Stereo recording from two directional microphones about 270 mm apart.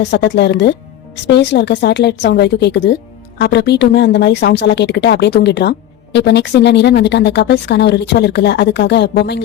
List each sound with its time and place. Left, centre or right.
0.0 s a woman's voice: left